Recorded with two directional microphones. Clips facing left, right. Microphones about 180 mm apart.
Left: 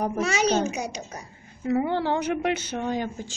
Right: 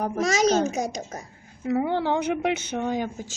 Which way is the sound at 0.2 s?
40° right (ahead or behind).